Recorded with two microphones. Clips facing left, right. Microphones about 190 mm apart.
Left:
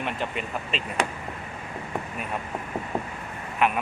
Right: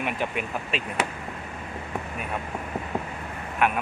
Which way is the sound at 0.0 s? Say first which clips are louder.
Right 1 dB; 5° right (ahead or behind).